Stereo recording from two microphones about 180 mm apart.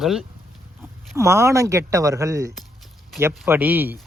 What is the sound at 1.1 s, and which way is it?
Speech, 15° right (ahead or behind).